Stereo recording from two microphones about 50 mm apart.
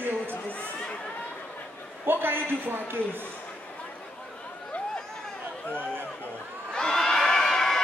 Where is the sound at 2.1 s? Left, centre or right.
Right.